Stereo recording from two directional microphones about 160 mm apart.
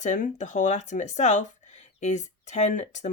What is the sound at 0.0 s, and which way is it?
Speech, 50° left (ahead or behind).